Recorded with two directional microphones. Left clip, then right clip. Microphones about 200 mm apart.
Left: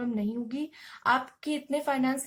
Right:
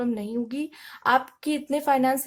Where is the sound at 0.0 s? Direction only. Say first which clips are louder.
Right 5 dB; 45° right (ahead or behind).